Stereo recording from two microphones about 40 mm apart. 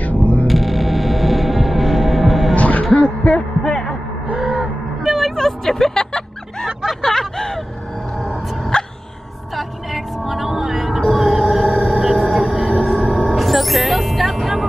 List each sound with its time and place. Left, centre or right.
0.0 s music: left
0.5 s vehicle: centre
2.5 s music: left
3.6 s music: centre
5.0 s vehicle: centre
5.3 s music: centre
6.9 s a sound: centre
8.7 s music: left
9.6 s music: centre; by 13.4 s right
13.4 s music: centre